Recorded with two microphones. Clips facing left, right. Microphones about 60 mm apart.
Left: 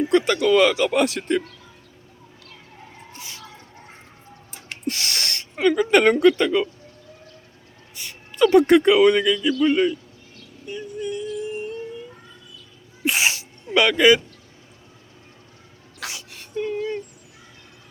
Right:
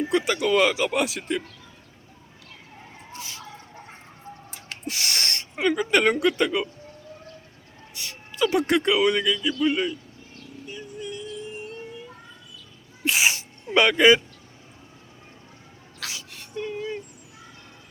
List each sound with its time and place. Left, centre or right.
0.1 s speech: centre
3.2 s speech: centre
4.9 s gasp: right
5.5 s speech: centre
7.9 s a sound: centre
8.4 s speech: centre
10.7 s music: centre
13.0 s sneeze: centre
13.7 s speech: right
16.0 s a sound: centre